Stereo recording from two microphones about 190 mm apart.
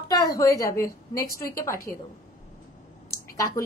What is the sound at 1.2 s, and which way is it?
Speech, 55° left (ahead or behind).